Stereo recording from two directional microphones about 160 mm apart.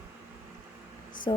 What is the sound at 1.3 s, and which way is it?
Speech, 25° left (ahead or behind).